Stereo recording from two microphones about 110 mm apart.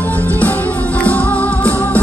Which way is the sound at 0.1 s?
15° left (ahead or behind).